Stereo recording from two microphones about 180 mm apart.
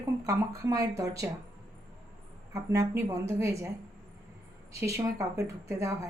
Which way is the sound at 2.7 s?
15° right (ahead or behind).